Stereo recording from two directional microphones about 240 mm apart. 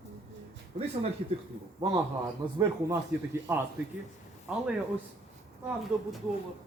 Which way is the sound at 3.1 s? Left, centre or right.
Centre.